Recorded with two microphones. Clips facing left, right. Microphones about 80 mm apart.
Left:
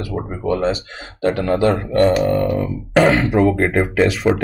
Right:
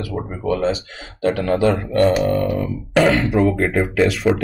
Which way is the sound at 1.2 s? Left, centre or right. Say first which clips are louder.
Left 1 dB; left.